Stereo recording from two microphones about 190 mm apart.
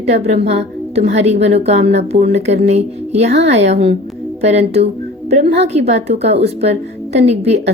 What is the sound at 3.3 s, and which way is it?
Speech, 65° right (ahead or behind).